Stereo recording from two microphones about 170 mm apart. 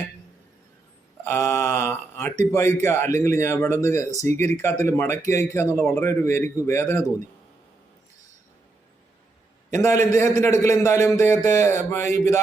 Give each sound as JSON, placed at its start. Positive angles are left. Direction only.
{"t": 1.2, "sound": "speech", "side_deg": 15}
{"t": 9.6, "sound": "a man's voice", "side_deg": 15}